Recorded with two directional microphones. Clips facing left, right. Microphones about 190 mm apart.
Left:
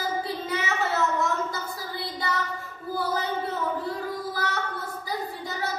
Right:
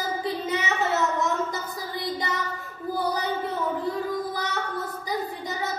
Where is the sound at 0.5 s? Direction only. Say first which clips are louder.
Even; 20° right (ahead or behind).